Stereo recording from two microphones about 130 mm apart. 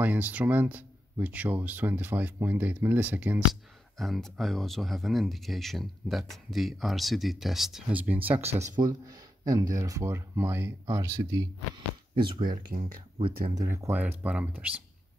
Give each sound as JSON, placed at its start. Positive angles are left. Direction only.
{"t": 0.0, "sound": "speech", "side_deg": -15}
{"t": 4.0, "sound": "speech", "side_deg": 0}
{"t": 8.7, "sound": "speech", "side_deg": -30}
{"t": 12.2, "sound": "speech", "side_deg": -40}
{"t": 13.6, "sound": "speech", "side_deg": -20}